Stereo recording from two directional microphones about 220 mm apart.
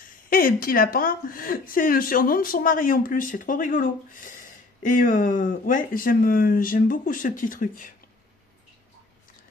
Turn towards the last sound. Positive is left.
turn(degrees=35)  # may be behind; listen again after turning